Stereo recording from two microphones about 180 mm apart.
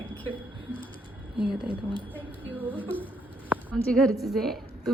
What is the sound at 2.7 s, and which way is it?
A woman's voice, 10° left (ahead or behind).